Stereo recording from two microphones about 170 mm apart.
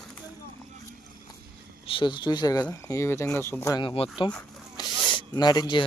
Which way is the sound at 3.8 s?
30° left (ahead or behind).